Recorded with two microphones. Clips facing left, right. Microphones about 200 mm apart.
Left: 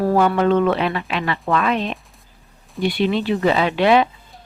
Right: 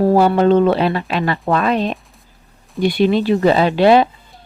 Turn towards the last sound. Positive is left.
turn(degrees=-35)  # may be behind; listen again after turning